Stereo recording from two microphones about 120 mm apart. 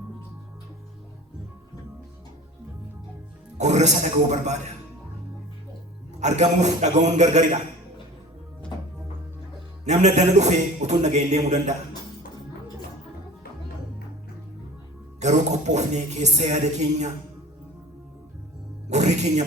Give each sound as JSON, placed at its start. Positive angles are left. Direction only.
{"t": 3.6, "sound": "speech", "side_deg": -75}
{"t": 6.1, "sound": "a man's voice", "side_deg": -80}
{"t": 9.8, "sound": "speech", "side_deg": -75}
{"t": 15.2, "sound": "speech", "side_deg": -75}
{"t": 18.9, "sound": "music", "side_deg": -75}